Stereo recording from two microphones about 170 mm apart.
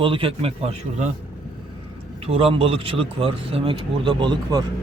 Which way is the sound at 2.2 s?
35° right (ahead or behind).